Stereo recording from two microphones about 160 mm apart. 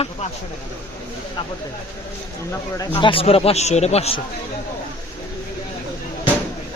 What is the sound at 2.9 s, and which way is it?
Speech, 35° left (ahead or behind).